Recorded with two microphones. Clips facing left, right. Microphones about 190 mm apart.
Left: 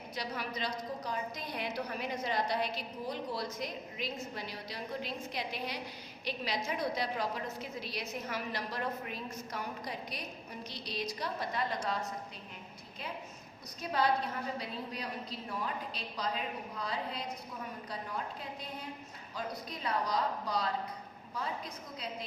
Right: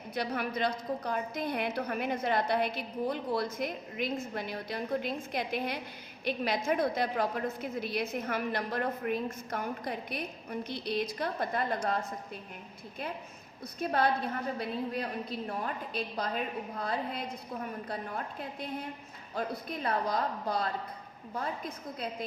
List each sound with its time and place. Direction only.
0.1 s a woman's voice: 55° right (ahead or behind)
13.7 s a woman's voice: 55° right (ahead or behind)